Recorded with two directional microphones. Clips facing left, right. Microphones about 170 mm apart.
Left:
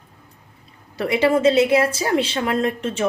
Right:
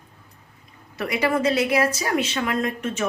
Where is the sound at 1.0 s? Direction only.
25° left (ahead or behind).